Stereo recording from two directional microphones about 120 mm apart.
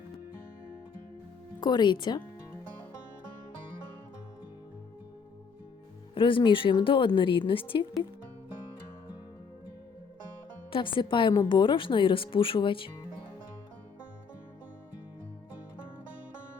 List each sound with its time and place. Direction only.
1.6 s speech: 40° left (ahead or behind)
6.1 s a woman's voice: 45° left (ahead or behind)
10.7 s a woman's voice: 45° left (ahead or behind)